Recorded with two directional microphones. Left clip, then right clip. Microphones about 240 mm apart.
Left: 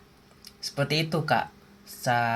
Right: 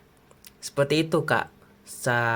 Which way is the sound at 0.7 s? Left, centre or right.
Right.